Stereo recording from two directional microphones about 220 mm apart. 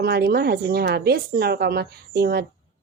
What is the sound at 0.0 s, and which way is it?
A woman's voice, 45° right (ahead or behind).